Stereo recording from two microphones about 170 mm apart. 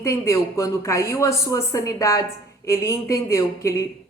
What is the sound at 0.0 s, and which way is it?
A woman's voice, 15° left (ahead or behind).